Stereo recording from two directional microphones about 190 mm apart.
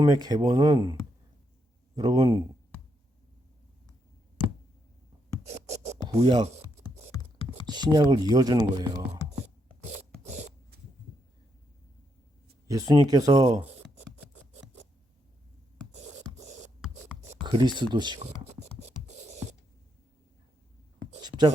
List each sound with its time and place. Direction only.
0.0 s speech: 20° right (ahead or behind)
2.0 s speech: 20° right (ahead or behind)
5.5 s music: 35° right (ahead or behind)
6.1 s speech: 30° right (ahead or behind)
7.7 s speech: 20° right (ahead or behind)
9.9 s a sound: 35° right (ahead or behind)
12.6 s speech: 15° right (ahead or behind)
16.0 s hands: 40° right (ahead or behind)
17.4 s speech: 25° right (ahead or behind)
18.8 s writing: 35° right (ahead or behind)
21.2 s writing: 20° right (ahead or behind)